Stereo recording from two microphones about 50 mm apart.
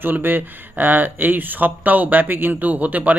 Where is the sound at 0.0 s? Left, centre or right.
Right.